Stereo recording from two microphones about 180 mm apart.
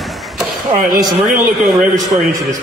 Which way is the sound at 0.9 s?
20° right (ahead or behind).